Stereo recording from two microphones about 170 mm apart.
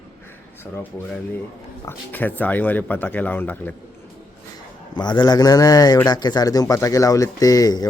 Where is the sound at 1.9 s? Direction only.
10° left (ahead or behind).